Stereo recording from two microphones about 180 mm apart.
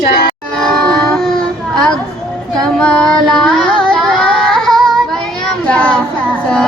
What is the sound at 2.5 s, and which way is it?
Singing, 5° left (ahead or behind).